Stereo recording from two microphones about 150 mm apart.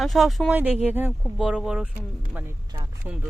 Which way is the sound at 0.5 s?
10° right (ahead or behind).